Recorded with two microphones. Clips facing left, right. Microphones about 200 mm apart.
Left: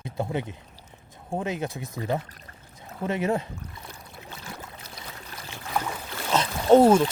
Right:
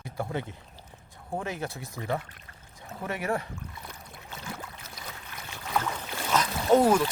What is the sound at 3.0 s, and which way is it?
Speech, 25° left (ahead or behind).